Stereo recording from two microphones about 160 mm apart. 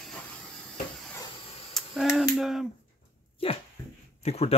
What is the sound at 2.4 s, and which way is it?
Speech, centre (ahead or behind).